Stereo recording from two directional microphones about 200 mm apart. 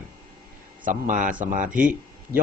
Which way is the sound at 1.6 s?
5° right (ahead or behind).